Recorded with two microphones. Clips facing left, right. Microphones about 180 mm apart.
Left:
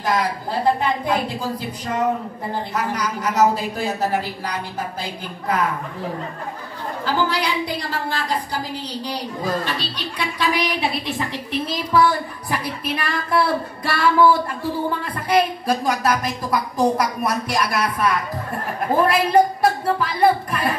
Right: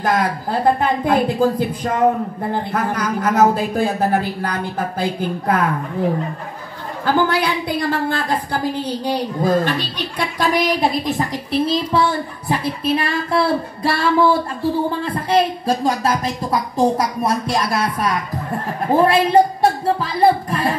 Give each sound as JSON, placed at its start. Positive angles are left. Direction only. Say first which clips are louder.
{"t": 0.0, "sound": "a man's voice", "louder": "right 3 dB", "side_deg": -55}
{"t": 7.1, "sound": "a man's voice", "louder": "right 5 dB", "side_deg": -55}
{"t": 18.9, "sound": "a woman's voice", "louder": "right 3 dB", "side_deg": -25}